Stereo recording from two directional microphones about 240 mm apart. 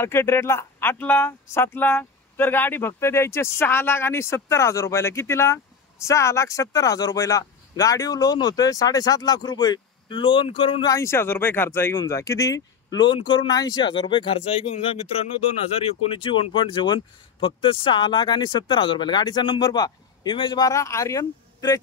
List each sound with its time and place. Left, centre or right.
0.0 s speech: centre